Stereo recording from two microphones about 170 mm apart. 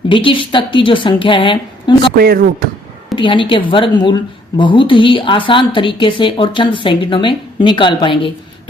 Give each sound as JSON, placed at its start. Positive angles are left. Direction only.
{"t": 0.1, "sound": "a woman's voice", "side_deg": 30}
{"t": 2.1, "sound": "speech", "side_deg": -60}
{"t": 3.2, "sound": "a woman's voice", "side_deg": 30}